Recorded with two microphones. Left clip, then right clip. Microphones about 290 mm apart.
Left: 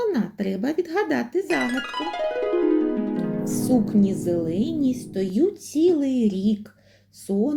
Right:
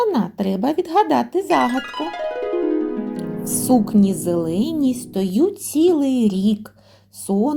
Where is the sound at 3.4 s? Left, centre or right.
Right.